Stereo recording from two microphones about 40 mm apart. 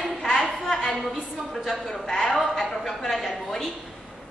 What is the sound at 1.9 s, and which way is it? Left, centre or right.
Speech, centre.